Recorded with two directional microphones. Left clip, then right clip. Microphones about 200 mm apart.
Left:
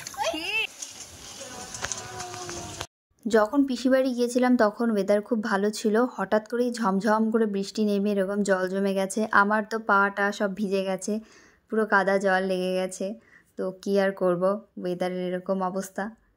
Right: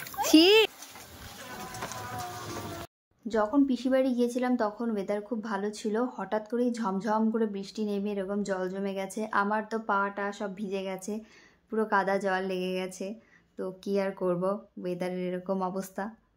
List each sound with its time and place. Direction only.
3.3 s speech: 35° left (ahead or behind); by 16.1 s 10° left (ahead or behind)